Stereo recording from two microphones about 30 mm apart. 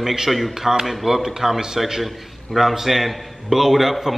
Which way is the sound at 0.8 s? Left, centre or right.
Centre.